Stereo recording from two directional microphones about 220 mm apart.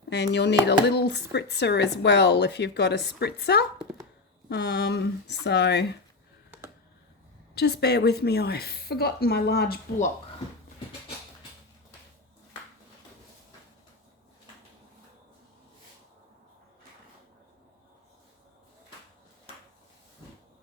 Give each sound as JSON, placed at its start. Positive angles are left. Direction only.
{"t": 0.1, "sound": "speech", "side_deg": 50}
{"t": 7.5, "sound": "speech", "side_deg": 50}